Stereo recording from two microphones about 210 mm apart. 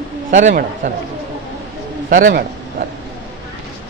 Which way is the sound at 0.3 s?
35° right (ahead or behind).